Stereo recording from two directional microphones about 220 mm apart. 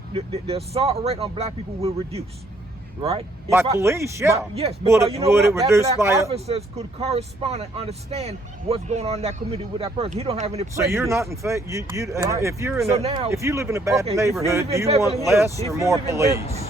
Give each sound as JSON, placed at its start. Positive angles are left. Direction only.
{"t": 0.1, "sound": "speech", "side_deg": -25}
{"t": 3.5, "sound": "speech", "side_deg": -10}
{"t": 4.5, "sound": "speech", "side_deg": -25}
{"t": 5.2, "sound": "speech", "side_deg": -10}
{"t": 6.3, "sound": "speech", "side_deg": -30}
{"t": 10.8, "sound": "speech", "side_deg": -15}
{"t": 13.0, "sound": "speech", "side_deg": -25}
{"t": 13.3, "sound": "speech", "side_deg": -15}